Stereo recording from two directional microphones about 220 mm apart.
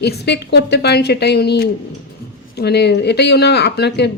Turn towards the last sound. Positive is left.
turn(degrees=50)  # may be behind; listen again after turning